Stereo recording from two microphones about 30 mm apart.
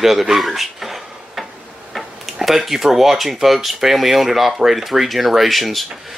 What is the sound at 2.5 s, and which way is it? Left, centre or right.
Speech, centre.